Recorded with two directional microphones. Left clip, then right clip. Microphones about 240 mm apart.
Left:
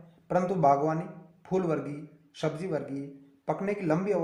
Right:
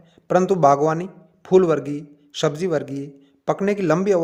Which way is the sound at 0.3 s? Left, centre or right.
Right.